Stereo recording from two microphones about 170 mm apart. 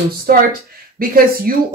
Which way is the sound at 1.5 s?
55° right (ahead or behind).